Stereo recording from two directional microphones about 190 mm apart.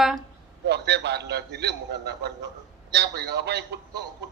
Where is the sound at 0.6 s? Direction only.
60° right (ahead or behind).